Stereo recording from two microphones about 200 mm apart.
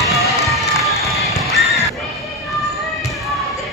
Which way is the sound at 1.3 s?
Centre (ahead or behind).